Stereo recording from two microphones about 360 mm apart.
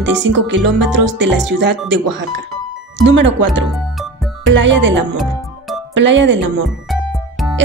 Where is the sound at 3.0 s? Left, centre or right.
Right.